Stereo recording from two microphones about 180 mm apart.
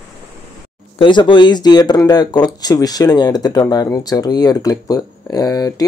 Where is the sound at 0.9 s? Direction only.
25° left (ahead or behind).